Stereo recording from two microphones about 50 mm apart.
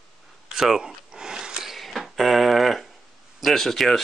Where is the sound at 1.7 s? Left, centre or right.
Centre.